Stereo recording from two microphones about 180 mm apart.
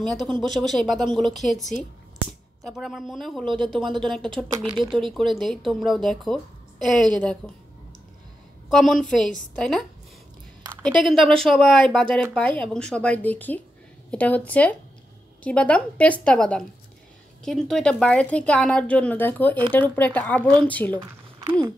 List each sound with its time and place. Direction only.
0.0 s speech: centre (ahead or behind)
8.6 s a woman's voice: centre (ahead or behind)
21.0 s a sound: 20° right (ahead or behind)